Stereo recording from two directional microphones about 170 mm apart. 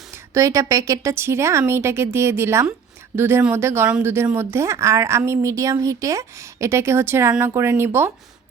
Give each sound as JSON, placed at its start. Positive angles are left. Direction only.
{"t": 0.1, "sound": "speech", "side_deg": -20}